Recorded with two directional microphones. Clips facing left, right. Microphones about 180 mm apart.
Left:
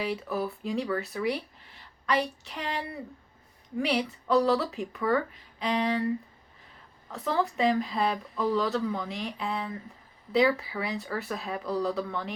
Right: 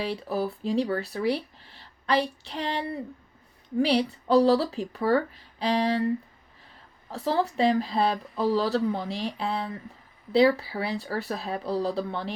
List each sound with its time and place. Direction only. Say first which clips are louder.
0.0 s speech: right 2 dB; 30° right (ahead or behind)
7.1 s speech: right 2 dB; 30° right (ahead or behind)